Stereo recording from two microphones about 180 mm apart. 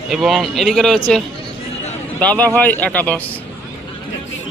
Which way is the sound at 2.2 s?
5° left (ahead or behind).